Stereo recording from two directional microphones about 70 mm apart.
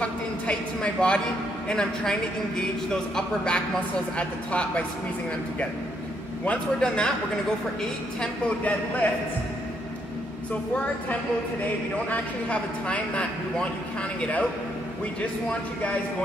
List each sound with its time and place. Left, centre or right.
0.0 s a sound: centre
1.7 s a man's voice: centre
6.4 s a man's voice: centre
8.2 s a man's voice: centre
10.5 s a man's voice: centre